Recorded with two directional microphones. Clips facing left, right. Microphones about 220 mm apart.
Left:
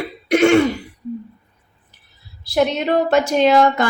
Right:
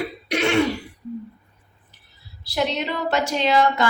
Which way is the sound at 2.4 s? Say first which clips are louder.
Left 6 dB; 50° left (ahead or behind).